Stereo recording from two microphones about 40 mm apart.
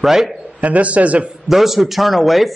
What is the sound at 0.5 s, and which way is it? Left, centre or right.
Speech, right.